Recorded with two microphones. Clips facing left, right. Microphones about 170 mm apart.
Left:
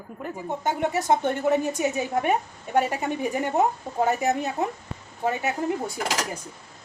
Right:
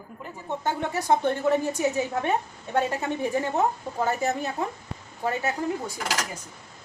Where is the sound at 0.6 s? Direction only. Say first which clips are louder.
Left 3 dB; 20° left (ahead or behind).